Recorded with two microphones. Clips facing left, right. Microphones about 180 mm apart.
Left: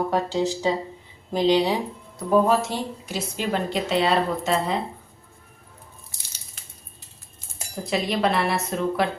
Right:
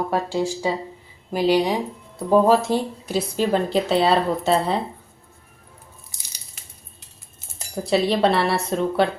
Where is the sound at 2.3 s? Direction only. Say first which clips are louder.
Right 3 dB; 35° right (ahead or behind).